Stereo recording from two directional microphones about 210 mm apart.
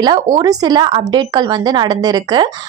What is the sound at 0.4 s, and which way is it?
A woman's voice, 20° right (ahead or behind).